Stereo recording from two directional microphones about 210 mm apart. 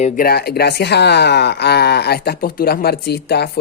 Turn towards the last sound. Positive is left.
turn(degrees=50)  # may be behind; listen again after turning